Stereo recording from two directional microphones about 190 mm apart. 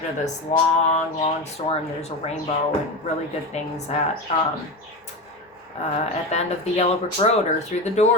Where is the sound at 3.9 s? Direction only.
35° left (ahead or behind).